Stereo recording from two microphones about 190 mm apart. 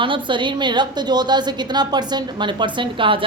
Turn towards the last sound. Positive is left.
turn(degrees=-25)  # may be behind; listen again after turning